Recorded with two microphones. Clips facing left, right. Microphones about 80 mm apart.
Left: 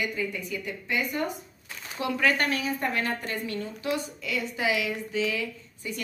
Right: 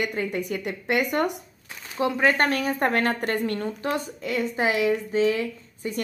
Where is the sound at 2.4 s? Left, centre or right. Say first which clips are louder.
Right 5 dB; right.